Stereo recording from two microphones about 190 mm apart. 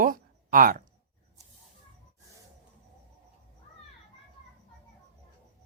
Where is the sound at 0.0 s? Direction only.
45° right (ahead or behind).